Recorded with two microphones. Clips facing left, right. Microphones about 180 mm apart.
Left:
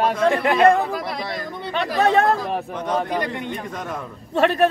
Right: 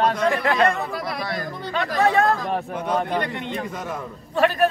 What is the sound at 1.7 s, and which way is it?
Speech, 20° left (ahead or behind).